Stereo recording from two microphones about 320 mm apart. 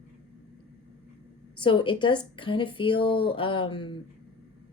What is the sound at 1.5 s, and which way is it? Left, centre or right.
Speech, centre.